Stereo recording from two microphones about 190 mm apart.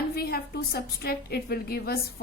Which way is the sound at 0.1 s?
55° left (ahead or behind).